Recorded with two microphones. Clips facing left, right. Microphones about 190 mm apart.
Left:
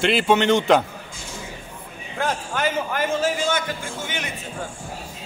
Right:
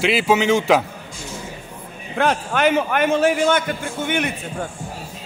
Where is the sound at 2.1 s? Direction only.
70° right (ahead or behind).